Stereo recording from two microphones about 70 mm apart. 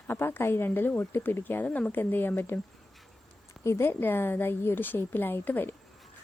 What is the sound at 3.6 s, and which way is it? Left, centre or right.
A woman's voice, left.